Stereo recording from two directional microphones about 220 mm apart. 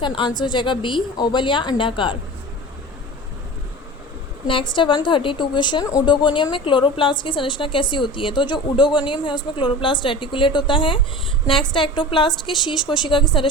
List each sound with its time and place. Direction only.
0.0 s a woman's voice: 20° left (ahead or behind)
4.4 s a woman's voice: 20° left (ahead or behind)